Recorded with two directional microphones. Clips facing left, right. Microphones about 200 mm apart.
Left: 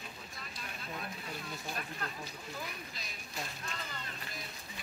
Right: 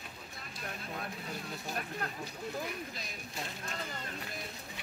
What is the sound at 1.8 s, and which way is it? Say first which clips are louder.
Speech: right 3 dB; 50° right (ahead or behind).